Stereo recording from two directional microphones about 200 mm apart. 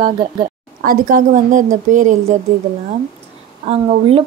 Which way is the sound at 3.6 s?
30° right (ahead or behind).